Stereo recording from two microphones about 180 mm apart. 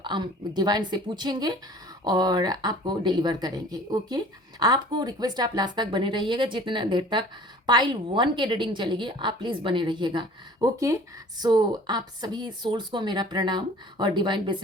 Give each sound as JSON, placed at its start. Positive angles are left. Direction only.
{"t": 0.0, "sound": "a woman's voice", "side_deg": -25}